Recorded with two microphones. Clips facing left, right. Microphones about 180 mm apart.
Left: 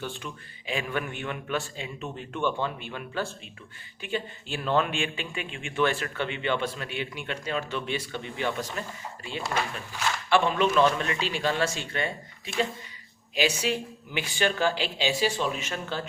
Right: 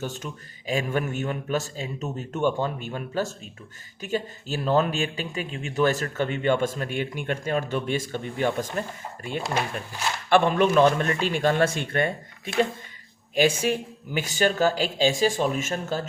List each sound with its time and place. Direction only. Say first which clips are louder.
0.0 s speech: right 3 dB; 45° right (ahead or behind)
10.2 s speech: right 4 dB; 50° right (ahead or behind)